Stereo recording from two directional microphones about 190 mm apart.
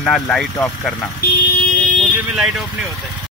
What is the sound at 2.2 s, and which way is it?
Speech, centre (ahead or behind).